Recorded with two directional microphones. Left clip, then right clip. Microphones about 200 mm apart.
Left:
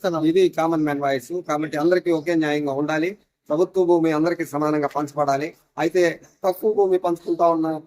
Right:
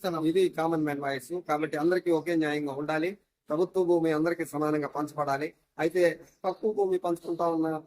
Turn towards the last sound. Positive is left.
turn(degrees=0)  # may be behind; listen again after turning